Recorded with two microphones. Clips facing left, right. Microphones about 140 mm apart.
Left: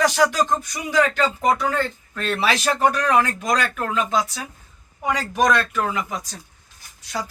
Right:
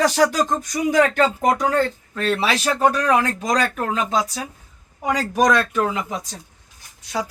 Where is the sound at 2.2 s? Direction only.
25° right (ahead or behind).